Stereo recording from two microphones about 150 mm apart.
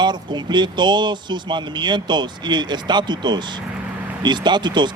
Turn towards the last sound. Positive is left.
turn(degrees=-30)  # may be behind; listen again after turning